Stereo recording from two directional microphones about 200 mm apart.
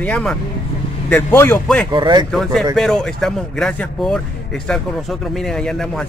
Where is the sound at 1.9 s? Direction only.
20° right (ahead or behind).